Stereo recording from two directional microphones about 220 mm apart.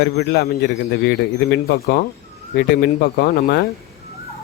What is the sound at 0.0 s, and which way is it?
Speech, 50° left (ahead or behind).